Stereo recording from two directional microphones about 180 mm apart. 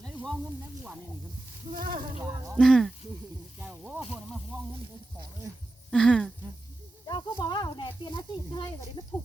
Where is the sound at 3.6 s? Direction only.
5° right (ahead or behind).